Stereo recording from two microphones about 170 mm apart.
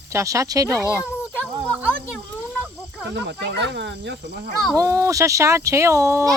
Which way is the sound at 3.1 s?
90° right.